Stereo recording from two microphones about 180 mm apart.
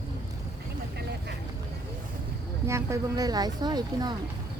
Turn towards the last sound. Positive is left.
turn(degrees=-25)  # may be behind; listen again after turning